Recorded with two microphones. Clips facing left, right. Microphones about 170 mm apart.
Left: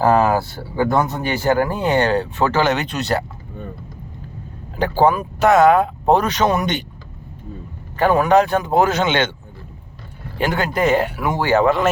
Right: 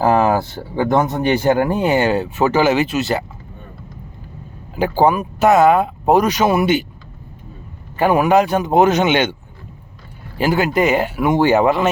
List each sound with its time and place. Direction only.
0.0 s speech: 15° right (ahead or behind)
1.9 s speech: 10° right (ahead or behind)
4.8 s speech: 10° right (ahead or behind)
7.9 s speech: 10° right (ahead or behind)
10.4 s speech: 5° right (ahead or behind)
11.2 s speech: 20° right (ahead or behind)